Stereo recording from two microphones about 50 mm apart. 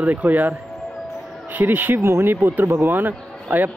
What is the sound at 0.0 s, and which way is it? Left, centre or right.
Speech, right.